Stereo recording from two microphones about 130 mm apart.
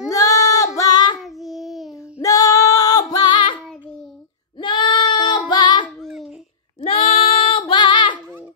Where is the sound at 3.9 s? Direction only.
5° left (ahead or behind).